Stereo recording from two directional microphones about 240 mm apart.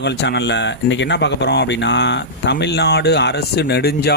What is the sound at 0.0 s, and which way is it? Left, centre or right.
Speech, left.